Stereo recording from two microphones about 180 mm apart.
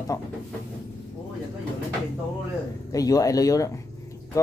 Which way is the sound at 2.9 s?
20° left (ahead or behind).